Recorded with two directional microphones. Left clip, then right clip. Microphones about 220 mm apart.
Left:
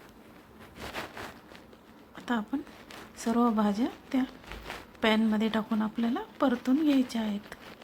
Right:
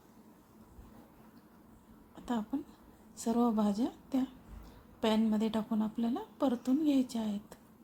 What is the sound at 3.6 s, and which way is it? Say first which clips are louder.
A woman's voice: left 4 dB; 5° left (ahead or behind).